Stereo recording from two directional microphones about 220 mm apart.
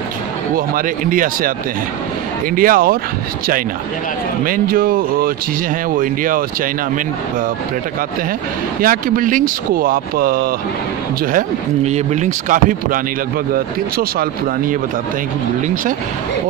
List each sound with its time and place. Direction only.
0.6 s speech: 40° right (ahead or behind)
2.5 s speech: 40° right (ahead or behind)
4.5 s speech: 40° right (ahead or behind)
8.8 s speech: 40° right (ahead or behind)
11.3 s speech: 30° right (ahead or behind)